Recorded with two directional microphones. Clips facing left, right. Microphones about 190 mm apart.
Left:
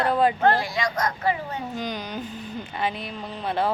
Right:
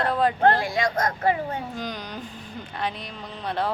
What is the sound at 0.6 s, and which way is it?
Speech, 50° right (ahead or behind).